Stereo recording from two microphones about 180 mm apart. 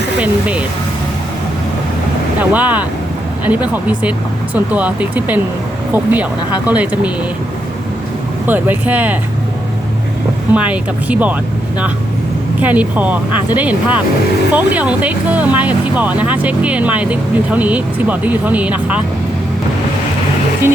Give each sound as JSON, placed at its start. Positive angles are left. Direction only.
{"t": 0.2, "sound": "speech", "side_deg": -5}
{"t": 2.4, "sound": "speech", "side_deg": -10}
{"t": 8.4, "sound": "speech", "side_deg": -10}
{"t": 10.5, "sound": "speech", "side_deg": -5}
{"t": 12.6, "sound": "speech", "side_deg": -10}